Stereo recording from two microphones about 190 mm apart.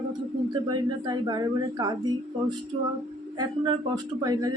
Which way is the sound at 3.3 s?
20° right (ahead or behind).